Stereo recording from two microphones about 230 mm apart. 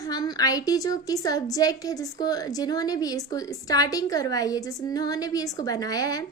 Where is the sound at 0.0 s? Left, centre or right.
Centre.